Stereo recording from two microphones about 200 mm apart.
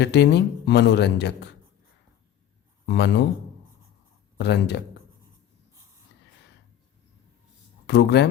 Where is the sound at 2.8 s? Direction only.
60° left (ahead or behind).